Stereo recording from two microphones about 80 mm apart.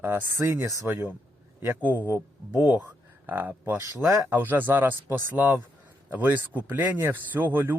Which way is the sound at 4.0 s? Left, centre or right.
Right.